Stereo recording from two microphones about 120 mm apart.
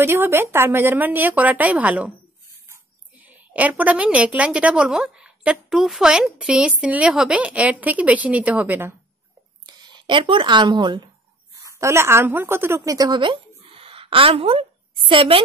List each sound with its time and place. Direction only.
0.0 s a woman's voice: 20° right (ahead or behind)
3.2 s a woman's voice: 10° right (ahead or behind)
9.8 s speech: 35° right (ahead or behind)
11.7 s a woman's voice: 25° right (ahead or behind); by 15.4 s 45° right (ahead or behind)